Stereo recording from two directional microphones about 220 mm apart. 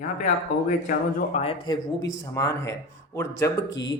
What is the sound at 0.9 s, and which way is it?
Speech, 30° left (ahead or behind).